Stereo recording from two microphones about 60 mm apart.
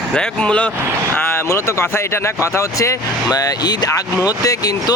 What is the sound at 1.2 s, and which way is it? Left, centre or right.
Speech, left.